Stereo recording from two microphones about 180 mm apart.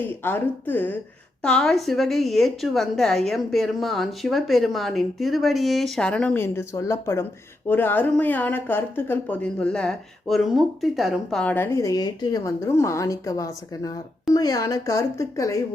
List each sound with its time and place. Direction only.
0.0 s a woman's voice: 10° left (ahead or behind)